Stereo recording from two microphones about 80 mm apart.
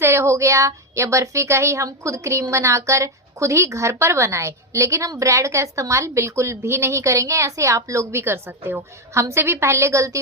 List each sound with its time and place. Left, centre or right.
0.0 s a woman's voice: right